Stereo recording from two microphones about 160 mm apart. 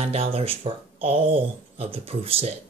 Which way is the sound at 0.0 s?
40° right (ahead or behind).